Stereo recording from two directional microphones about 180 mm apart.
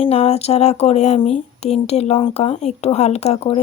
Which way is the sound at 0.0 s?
35° left (ahead or behind).